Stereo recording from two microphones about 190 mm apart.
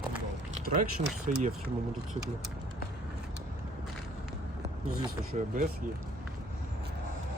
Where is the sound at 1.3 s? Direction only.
35° right (ahead or behind).